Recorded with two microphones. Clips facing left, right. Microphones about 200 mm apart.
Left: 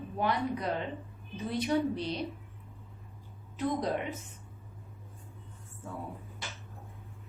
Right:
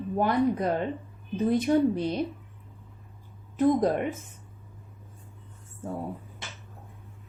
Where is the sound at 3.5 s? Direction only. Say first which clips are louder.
Right 9 dB; 50° right (ahead or behind).